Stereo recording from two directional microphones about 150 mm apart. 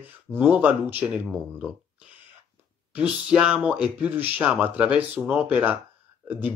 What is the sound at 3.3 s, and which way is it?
Speech, 5° right (ahead or behind).